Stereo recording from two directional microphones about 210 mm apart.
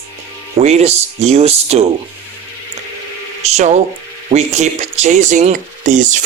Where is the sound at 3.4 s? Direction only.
30° right (ahead or behind).